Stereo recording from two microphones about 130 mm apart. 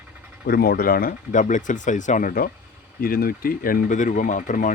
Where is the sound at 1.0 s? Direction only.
75° left (ahead or behind).